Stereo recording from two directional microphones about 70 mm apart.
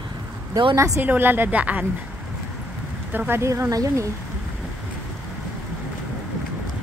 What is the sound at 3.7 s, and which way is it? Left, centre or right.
Speech, right.